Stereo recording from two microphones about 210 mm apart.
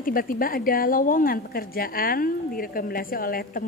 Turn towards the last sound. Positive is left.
turn(degrees=45)  # may be behind; listen again after turning